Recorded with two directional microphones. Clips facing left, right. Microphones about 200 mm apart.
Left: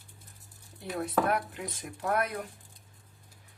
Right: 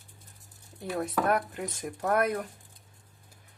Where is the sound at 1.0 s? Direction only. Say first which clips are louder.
Right 1 dB; 45° right (ahead or behind).